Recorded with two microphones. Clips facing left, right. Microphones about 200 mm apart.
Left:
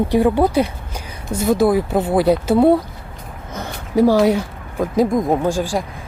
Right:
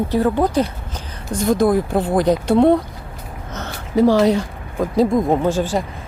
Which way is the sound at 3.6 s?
10° left (ahead or behind).